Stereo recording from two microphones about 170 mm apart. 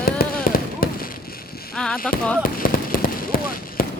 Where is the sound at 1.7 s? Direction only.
5° left (ahead or behind).